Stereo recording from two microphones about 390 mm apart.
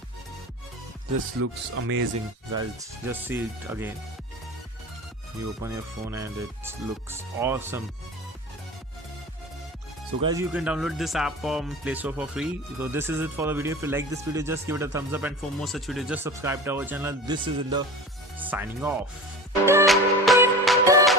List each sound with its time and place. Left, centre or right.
1.4 s speech: right
3.1 s speech: centre
5.6 s speech: centre
10.2 s speech: centre
19.6 s music: centre